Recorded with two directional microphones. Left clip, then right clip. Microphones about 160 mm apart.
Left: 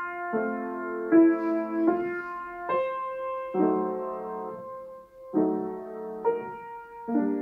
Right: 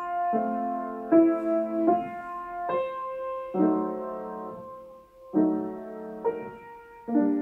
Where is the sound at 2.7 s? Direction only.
10° right (ahead or behind).